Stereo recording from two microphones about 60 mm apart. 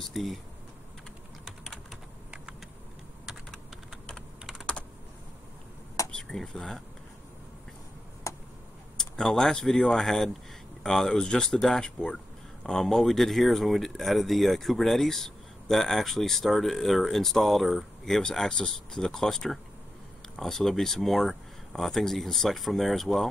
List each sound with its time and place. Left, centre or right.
0.1 s speech: centre
1.4 s typing: centre
6.1 s speech: centre
8.3 s a sound: left
8.9 s speech: centre